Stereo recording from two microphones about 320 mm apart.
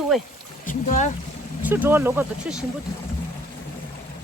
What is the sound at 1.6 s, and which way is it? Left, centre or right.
Speech, centre.